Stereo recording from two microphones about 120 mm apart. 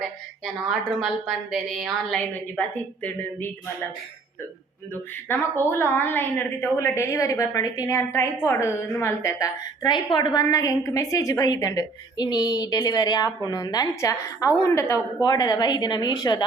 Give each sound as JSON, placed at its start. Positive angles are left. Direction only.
{"t": 0.0, "sound": "a woman's voice", "side_deg": 0}
{"t": 2.6, "sound": "a woman's voice", "side_deg": 15}
{"t": 5.3, "sound": "a woman's voice", "side_deg": 20}
{"t": 9.8, "sound": "a woman's voice", "side_deg": 40}
{"t": 10.4, "sound": "a woman's voice", "side_deg": 30}